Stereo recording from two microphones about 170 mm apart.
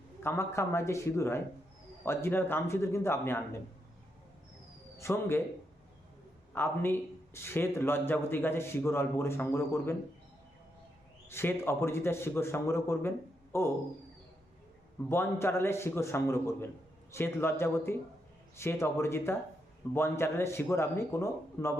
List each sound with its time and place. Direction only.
0.2 s a man's voice: 15° left (ahead or behind)
4.9 s a man's voice: 15° left (ahead or behind)
6.5 s a man's voice: 10° left (ahead or behind)
11.3 s a man's voice: 15° left (ahead or behind)
15.1 s a man's voice: 15° left (ahead or behind)